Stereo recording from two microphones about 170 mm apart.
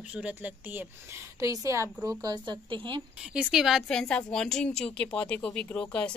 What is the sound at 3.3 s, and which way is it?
A woman's voice, centre (ahead or behind).